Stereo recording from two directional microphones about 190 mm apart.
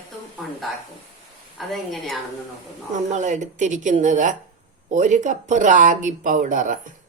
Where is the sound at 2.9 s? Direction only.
40° right (ahead or behind).